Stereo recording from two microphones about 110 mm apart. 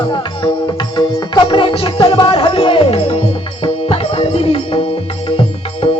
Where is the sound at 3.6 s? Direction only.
55° left (ahead or behind).